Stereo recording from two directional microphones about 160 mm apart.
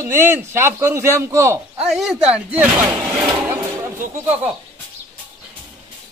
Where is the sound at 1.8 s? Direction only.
Centre (ahead or behind).